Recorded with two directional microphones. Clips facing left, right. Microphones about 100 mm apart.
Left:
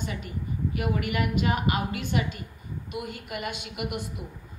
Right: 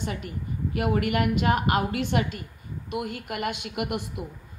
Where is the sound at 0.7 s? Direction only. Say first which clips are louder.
Right 5 dB; 65° right (ahead or behind); by 4.0 s 85° right.